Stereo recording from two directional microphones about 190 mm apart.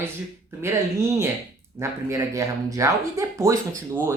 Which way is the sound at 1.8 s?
15° right (ahead or behind).